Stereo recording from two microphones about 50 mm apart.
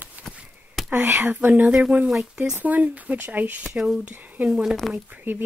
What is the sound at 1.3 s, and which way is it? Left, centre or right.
Speech, right.